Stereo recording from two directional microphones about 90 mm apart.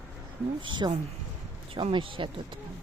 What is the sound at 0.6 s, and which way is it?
Speech, 60° right (ahead or behind).